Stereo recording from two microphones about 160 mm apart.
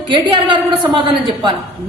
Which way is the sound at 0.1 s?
30° right (ahead or behind).